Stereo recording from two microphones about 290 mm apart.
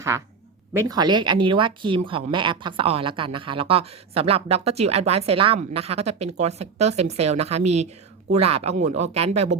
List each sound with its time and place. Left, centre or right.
0.7 s speech: centre